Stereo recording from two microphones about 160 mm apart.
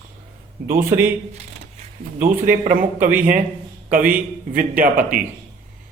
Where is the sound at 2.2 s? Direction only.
55° right (ahead or behind).